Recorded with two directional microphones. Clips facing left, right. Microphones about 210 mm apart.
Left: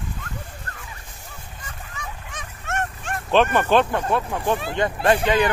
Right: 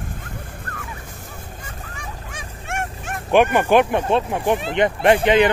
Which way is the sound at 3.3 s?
15° right (ahead or behind).